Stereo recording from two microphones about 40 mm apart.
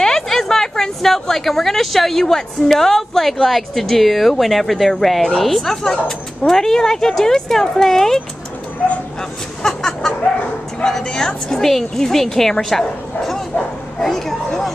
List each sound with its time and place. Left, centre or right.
0.0 s a woman's voice: centre
9.6 s a sound: centre
10.8 s speech: centre
11.4 s speech: centre